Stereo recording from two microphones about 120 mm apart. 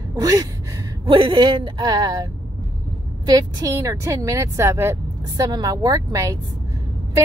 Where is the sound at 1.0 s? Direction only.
45° right (ahead or behind).